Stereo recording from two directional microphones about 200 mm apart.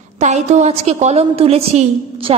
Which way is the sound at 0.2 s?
35° right (ahead or behind).